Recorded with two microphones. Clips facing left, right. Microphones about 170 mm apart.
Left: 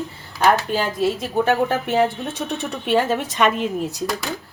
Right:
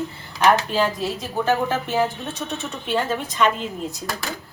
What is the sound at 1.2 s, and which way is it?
A woman's voice, 60° left (ahead or behind).